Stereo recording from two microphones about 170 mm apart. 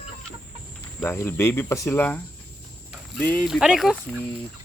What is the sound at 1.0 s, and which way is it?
Speech, 15° left (ahead or behind).